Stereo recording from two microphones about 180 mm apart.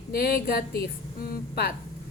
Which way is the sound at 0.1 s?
60° left (ahead or behind).